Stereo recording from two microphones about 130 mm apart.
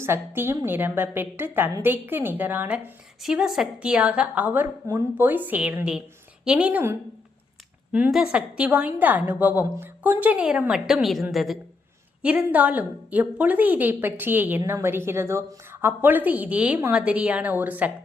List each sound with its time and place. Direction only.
0.0 s a woman's voice: 20° right (ahead or behind)
8.1 s a woman's voice: 5° right (ahead or behind)